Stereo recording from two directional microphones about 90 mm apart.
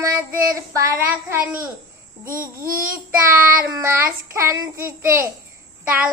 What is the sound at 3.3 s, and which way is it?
Child singing, 30° right (ahead or behind).